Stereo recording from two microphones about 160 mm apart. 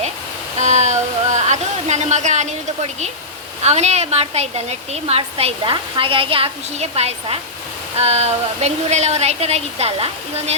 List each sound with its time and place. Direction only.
0.6 s a woman's voice: 45° right (ahead or behind)